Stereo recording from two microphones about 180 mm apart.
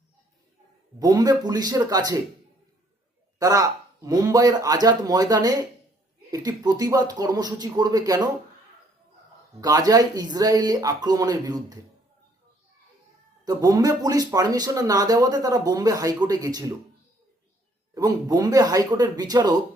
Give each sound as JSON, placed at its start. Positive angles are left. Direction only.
{"t": 0.9, "sound": "speech", "side_deg": -20}
{"t": 3.3, "sound": "speech", "side_deg": -20}
{"t": 9.6, "sound": "speech", "side_deg": -20}
{"t": 13.4, "sound": "speech", "side_deg": -20}
{"t": 17.9, "sound": "speech", "side_deg": -20}